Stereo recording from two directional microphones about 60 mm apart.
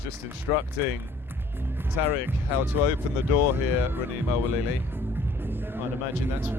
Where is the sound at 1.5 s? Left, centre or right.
Right.